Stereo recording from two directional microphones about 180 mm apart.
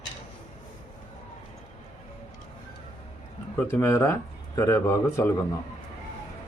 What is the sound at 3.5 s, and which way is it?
A man's voice, 10° left (ahead or behind).